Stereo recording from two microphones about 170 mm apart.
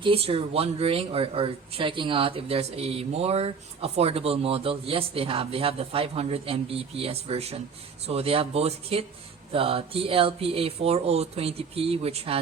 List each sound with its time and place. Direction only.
0.0 s speech: 35° right (ahead or behind)